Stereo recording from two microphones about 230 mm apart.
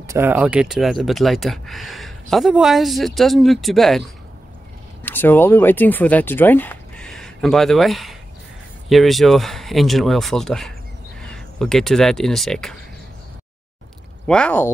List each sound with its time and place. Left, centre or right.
0.0 s speech: centre
5.0 s speech: centre
14.2 s speech: centre